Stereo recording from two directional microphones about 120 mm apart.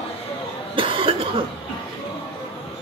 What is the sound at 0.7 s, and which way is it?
Cough, 45° right (ahead or behind).